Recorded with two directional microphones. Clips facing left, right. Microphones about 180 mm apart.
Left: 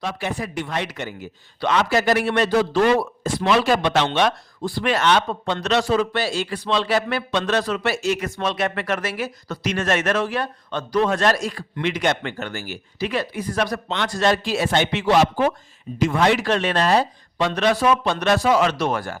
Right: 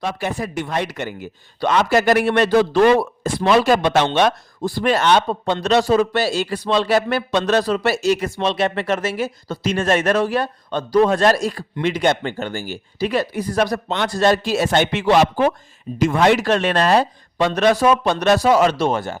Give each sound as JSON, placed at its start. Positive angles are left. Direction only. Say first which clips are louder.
{"t": 0.0, "sound": "a man's voice", "louder": "right 3 dB", "side_deg": -45}
{"t": 16.0, "sound": "speech", "louder": "right 3 dB", "side_deg": -45}
{"t": 18.8, "sound": "speech", "louder": "right 3 dB", "side_deg": -25}